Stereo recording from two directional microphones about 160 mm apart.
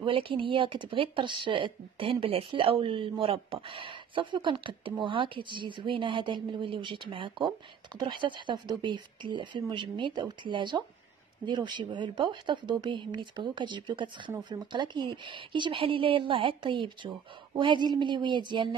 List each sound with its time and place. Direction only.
0.0 s a woman's voice: 35° right (ahead or behind)